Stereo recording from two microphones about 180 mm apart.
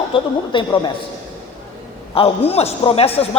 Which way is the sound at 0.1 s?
25° left (ahead or behind).